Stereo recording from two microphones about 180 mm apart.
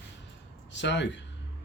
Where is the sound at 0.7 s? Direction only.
75° left (ahead or behind).